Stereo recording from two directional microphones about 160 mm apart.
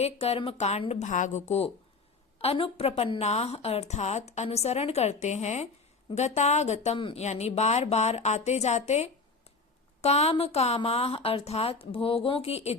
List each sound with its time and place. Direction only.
0.0 s a woman's voice: 40° left (ahead or behind)